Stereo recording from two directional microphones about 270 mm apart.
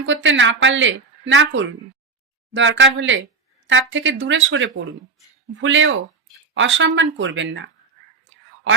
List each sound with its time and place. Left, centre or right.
0.0 s a woman's voice: right